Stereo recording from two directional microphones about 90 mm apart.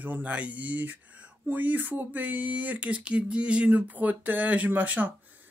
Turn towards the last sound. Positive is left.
turn(degrees=-20)  # may be behind; listen again after turning